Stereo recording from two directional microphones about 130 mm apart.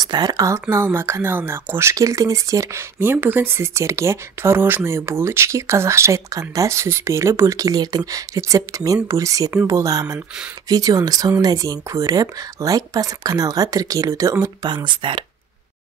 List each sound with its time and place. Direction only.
0.0 s speech: 30° right (ahead or behind)